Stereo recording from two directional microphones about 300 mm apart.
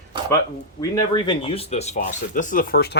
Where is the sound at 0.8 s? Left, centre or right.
Centre.